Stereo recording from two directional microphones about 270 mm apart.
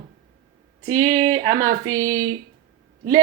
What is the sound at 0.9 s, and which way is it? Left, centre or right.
Speech, centre.